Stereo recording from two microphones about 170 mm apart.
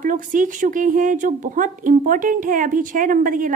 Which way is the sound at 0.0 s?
50° right (ahead or behind).